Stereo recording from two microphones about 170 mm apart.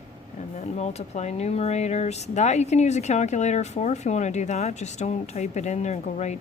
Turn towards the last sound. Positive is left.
turn(degrees=40)  # may be behind; listen again after turning